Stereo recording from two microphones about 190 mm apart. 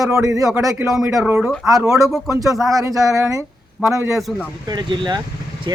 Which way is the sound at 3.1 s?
15° right (ahead or behind).